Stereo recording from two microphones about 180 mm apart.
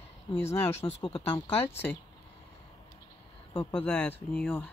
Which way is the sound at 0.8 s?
30° left (ahead or behind).